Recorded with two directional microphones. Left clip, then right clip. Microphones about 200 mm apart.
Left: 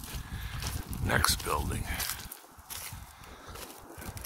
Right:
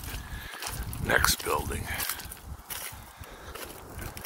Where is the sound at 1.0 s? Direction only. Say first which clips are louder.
Right 4 dB; 10° left (ahead or behind).